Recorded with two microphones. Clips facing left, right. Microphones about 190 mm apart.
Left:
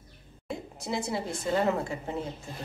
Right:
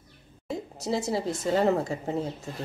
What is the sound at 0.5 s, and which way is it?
A woman's voice, 40° right (ahead or behind).